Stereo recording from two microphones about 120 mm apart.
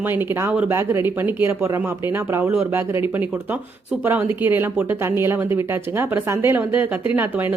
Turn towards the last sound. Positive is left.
turn(degrees=-15)  # may be behind; listen again after turning